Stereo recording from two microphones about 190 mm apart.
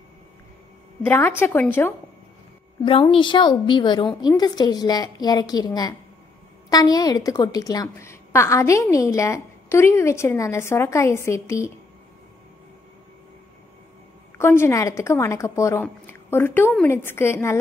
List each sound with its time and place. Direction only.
1.0 s a woman's voice: 10° left (ahead or behind)
2.8 s a woman's voice: 25° left (ahead or behind)
14.4 s a woman's voice: 15° left (ahead or behind)